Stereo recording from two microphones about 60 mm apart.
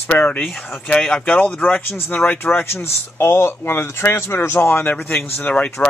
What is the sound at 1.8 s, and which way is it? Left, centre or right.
Speech, left.